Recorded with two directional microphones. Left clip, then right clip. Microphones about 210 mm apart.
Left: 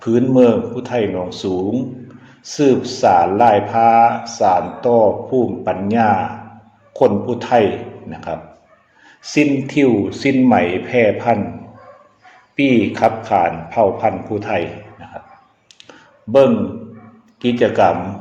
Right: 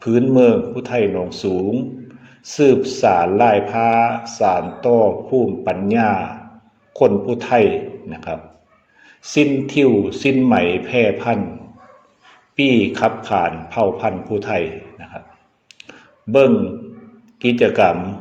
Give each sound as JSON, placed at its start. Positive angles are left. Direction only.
{"t": 0.0, "sound": "a man's voice", "side_deg": -15}
{"t": 12.5, "sound": "a man's voice", "side_deg": -20}
{"t": 15.8, "sound": "a sound", "side_deg": -20}
{"t": 17.4, "sound": "speech", "side_deg": -15}